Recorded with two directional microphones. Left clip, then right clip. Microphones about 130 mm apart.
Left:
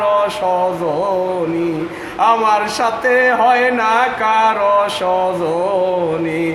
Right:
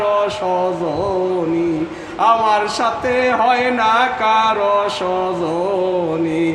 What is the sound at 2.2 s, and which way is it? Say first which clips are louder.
Speech: left 1 dB; 25° left (ahead or behind).